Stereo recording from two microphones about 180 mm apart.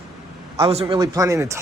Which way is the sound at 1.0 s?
20° right (ahead or behind).